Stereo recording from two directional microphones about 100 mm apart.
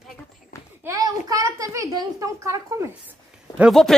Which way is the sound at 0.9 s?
35° right (ahead or behind).